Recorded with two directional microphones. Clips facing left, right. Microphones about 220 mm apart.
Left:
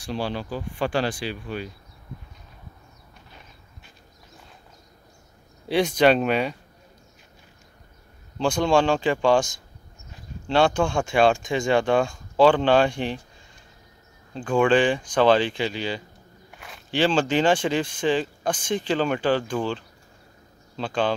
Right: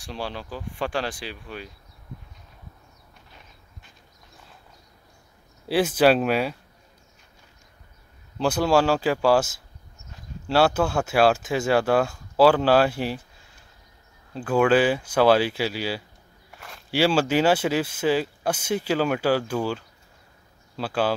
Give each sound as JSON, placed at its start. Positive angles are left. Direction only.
{"t": 0.0, "sound": "speech", "side_deg": 0}
{"t": 5.7, "sound": "speech", "side_deg": -5}
{"t": 8.4, "sound": "speech", "side_deg": -5}
{"t": 14.3, "sound": "speech", "side_deg": -5}